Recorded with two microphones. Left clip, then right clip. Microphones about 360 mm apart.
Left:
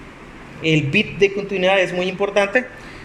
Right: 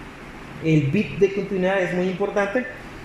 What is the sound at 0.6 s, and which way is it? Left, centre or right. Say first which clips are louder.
A man's voice: left 4 dB; left.